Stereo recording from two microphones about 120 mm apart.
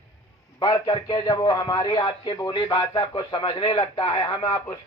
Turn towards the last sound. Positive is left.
turn(degrees=40)  # may be behind; listen again after turning